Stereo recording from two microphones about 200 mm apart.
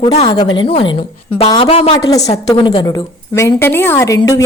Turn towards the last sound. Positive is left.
turn(degrees=15)  # may be behind; listen again after turning